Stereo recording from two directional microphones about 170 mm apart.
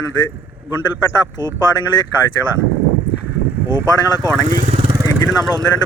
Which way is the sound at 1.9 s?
30° left (ahead or behind).